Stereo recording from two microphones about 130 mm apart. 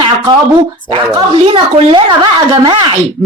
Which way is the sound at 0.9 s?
40° right (ahead or behind).